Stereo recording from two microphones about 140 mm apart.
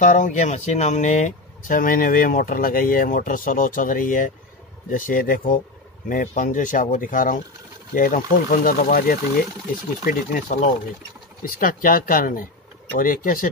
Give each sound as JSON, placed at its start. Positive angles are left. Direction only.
{"t": 0.0, "sound": "speech", "side_deg": 65}
{"t": 6.0, "sound": "speech", "side_deg": 65}
{"t": 10.0, "sound": "speech", "side_deg": 70}